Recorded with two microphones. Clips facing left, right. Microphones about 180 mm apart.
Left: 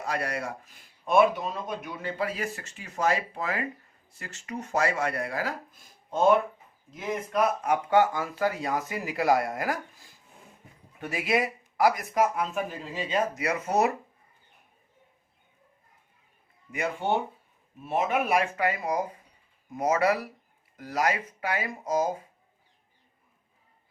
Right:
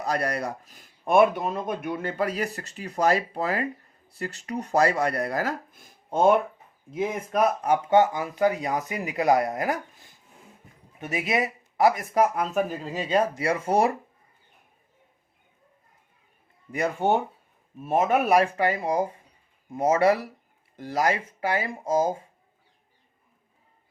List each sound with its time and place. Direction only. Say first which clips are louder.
0.0 s speech: right 4 dB; 35° right (ahead or behind)
7.6 s speech: right 3 dB; 25° right (ahead or behind)
11.0 s speech: right 1 dB; 20° right (ahead or behind)
16.7 s speech: right 4 dB; 40° right (ahead or behind)